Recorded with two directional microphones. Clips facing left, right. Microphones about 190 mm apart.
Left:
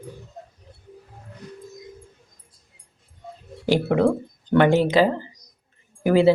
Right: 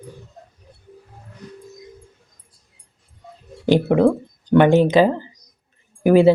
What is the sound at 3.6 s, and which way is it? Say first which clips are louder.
Speech: right 4 dB; 20° right (ahead or behind).